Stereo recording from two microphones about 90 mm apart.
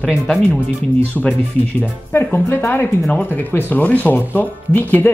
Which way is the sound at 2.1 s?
30° left (ahead or behind).